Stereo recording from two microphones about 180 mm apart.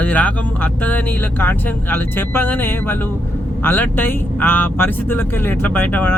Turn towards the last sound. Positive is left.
turn(degrees=10)  # may be behind; listen again after turning